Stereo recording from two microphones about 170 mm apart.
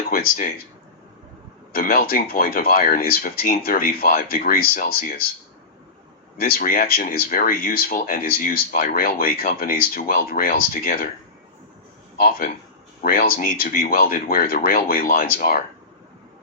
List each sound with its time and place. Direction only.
0.1 s speech: 60° left (ahead or behind)
1.7 s speech: 60° left (ahead or behind)
6.3 s speech: 60° left (ahead or behind)
12.2 s speech: 55° left (ahead or behind)